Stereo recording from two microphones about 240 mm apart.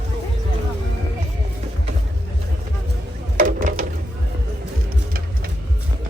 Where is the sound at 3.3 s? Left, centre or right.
Right.